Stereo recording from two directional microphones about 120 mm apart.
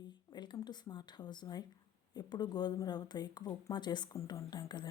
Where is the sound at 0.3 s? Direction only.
35° left (ahead or behind).